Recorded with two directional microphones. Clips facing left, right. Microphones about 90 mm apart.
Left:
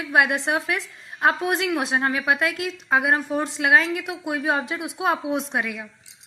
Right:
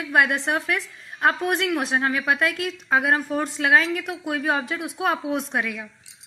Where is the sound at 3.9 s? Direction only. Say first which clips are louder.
Even; 10° left (ahead or behind).